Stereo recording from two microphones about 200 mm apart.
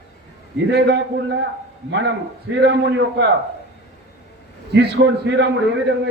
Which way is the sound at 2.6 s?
65° right (ahead or behind).